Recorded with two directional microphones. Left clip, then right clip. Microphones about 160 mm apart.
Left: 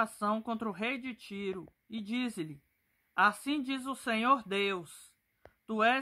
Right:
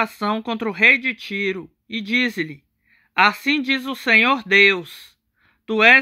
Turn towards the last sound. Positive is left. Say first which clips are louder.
# right 16 dB
turn(degrees=-10)  # may be behind; listen again after turning